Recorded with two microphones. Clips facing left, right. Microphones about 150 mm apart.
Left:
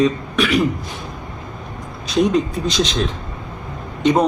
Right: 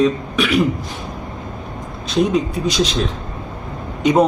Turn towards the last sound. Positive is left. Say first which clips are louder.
# right 2 dB
turn(degrees=-5)  # may be behind; listen again after turning